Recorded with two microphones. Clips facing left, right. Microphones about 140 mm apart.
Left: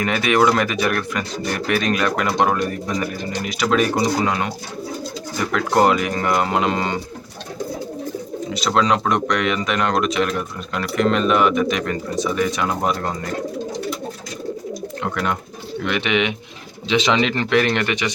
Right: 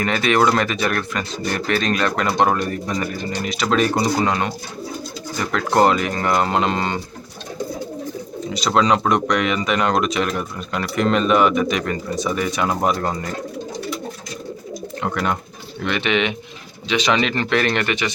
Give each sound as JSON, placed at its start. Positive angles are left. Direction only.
{"t": 0.0, "sound": "speech", "side_deg": 10}
{"t": 8.5, "sound": "speech", "side_deg": 0}
{"t": 15.0, "sound": "speech", "side_deg": 0}
{"t": 15.8, "sound": "speech", "side_deg": 10}